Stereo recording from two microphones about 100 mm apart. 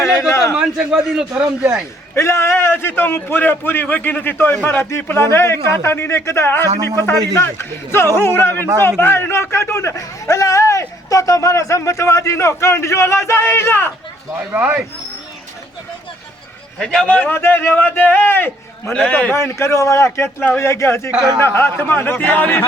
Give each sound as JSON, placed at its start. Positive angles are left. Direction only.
{"t": 0.0, "sound": "a sound", "side_deg": 30}
{"t": 0.5, "sound": "a man's voice", "side_deg": -10}
{"t": 2.1, "sound": "a man's voice", "side_deg": 25}
{"t": 14.5, "sound": "speech", "side_deg": -20}
{"t": 16.8, "sound": "a man's voice", "side_deg": 5}
{"t": 18.9, "sound": "a man's voice", "side_deg": 10}
{"t": 19.3, "sound": "a man's voice", "side_deg": 25}